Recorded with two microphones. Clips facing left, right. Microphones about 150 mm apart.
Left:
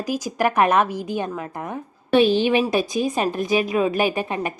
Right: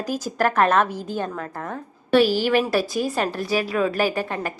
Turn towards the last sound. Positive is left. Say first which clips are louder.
# left 1 dB
turn(degrees=20)  # may be behind; listen again after turning